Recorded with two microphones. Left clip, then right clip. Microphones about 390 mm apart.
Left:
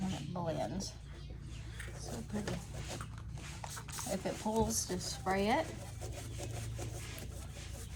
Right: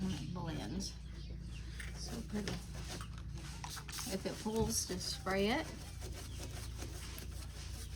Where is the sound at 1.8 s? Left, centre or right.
Centre.